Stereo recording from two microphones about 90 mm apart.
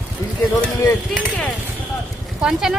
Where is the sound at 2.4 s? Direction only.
5° right (ahead or behind).